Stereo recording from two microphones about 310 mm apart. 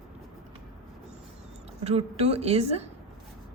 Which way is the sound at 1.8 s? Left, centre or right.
Centre.